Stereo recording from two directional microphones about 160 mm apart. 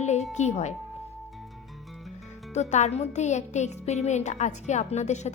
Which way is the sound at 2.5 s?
45° left (ahead or behind).